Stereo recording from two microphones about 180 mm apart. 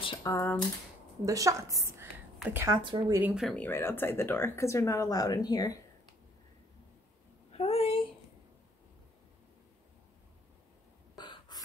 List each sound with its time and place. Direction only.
0.0 s typing: 25° left (ahead or behind)
0.3 s speech: 15° left (ahead or behind)
1.2 s a woman's voice: 20° right (ahead or behind)
2.8 s speech: 25° right (ahead or behind)
3.3 s speech: centre (ahead or behind)
3.6 s speech: 10° left (ahead or behind)
7.5 s a sound: 35° left (ahead or behind)
11.1 s a sound: 25° left (ahead or behind)